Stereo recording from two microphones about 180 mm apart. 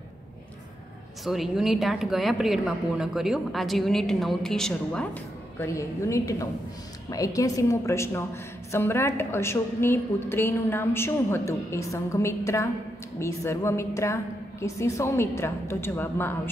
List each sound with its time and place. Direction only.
1.2 s a woman's voice: centre (ahead or behind)
5.6 s a woman's voice: 15° left (ahead or behind)